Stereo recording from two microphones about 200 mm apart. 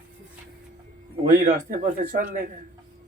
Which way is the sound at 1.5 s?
40° right (ahead or behind).